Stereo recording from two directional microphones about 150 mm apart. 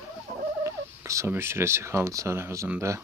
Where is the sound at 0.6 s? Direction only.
20° right (ahead or behind).